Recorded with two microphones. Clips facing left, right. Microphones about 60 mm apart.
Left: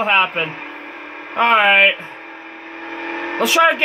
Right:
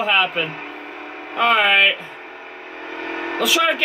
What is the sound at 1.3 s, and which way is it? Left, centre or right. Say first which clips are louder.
Speech: left 3 dB; left.